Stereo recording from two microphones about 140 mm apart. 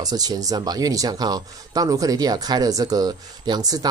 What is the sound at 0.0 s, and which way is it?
Speech, 30° right (ahead or behind).